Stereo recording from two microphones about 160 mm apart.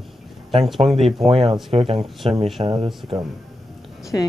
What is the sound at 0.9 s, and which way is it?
Speech, centre (ahead or behind).